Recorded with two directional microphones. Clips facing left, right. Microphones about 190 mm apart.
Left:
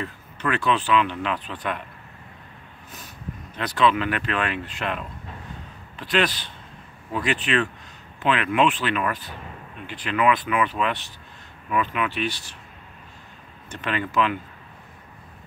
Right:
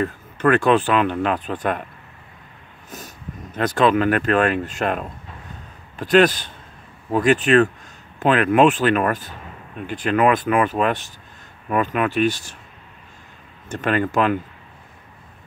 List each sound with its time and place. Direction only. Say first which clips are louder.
0.0 s speech: right 9 dB; 50° right (ahead or behind)
3.5 s speech: right 4 dB; 45° right (ahead or behind)
13.7 s speech: right 7 dB; 45° right (ahead or behind)